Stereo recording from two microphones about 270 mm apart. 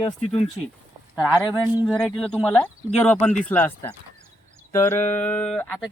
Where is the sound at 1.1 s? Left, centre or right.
Centre.